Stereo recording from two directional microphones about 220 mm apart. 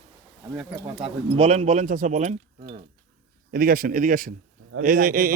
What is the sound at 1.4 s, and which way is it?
Speech, 30° right (ahead or behind).